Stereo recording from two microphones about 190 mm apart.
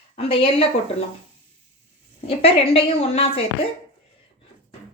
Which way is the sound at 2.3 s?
30° left (ahead or behind).